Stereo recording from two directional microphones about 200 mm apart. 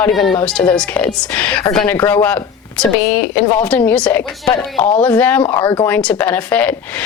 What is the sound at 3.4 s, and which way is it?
A woman's voice, 10° left (ahead or behind).